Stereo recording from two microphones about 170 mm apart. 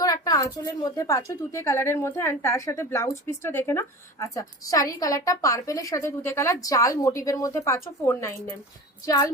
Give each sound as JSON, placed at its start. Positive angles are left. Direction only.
{"t": 0.0, "sound": "a woman's voice", "side_deg": 20}